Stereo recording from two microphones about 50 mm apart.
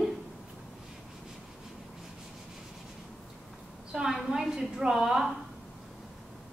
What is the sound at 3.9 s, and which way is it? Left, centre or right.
A woman's voice, centre.